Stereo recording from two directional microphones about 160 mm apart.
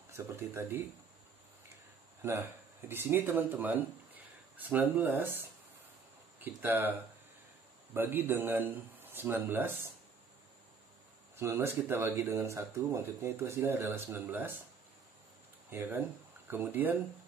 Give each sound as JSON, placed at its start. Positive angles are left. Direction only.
{"t": 0.1, "sound": "speech", "side_deg": -15}
{"t": 2.2, "sound": "speech", "side_deg": -15}
{"t": 6.4, "sound": "speech", "side_deg": -15}
{"t": 11.3, "sound": "speech", "side_deg": -15}
{"t": 15.7, "sound": "speech", "side_deg": -15}